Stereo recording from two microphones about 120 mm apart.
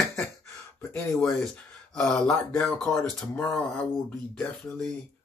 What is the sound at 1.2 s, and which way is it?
Speech, 5° left (ahead or behind).